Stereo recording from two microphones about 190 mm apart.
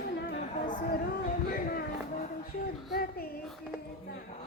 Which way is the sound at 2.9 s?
50° left (ahead or behind).